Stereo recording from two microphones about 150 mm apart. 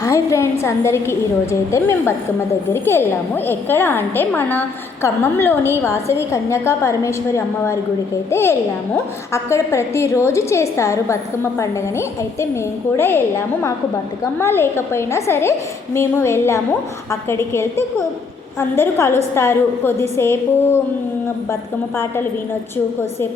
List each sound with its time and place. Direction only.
0.0 s a sound: 20° left (ahead or behind)
0.6 s a woman's voice: 20° left (ahead or behind)
21.9 s a woman's voice: 15° left (ahead or behind)